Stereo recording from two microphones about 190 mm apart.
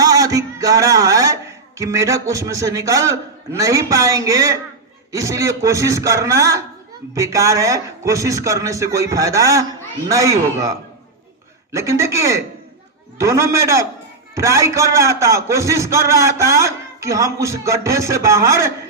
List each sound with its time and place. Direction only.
0.0 s a man's voice: 20° right (ahead or behind)